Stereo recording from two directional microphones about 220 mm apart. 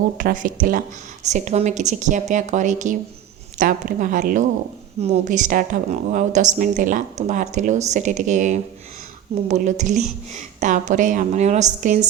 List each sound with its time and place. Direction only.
0.2 s speech: 40° right (ahead or behind)